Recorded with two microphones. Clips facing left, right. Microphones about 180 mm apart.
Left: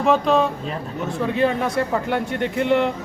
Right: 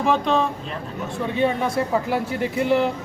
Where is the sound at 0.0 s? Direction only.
Centre (ahead or behind).